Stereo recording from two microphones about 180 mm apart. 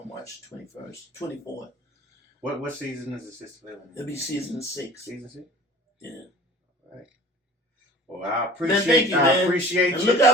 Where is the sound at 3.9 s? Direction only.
15° left (ahead or behind).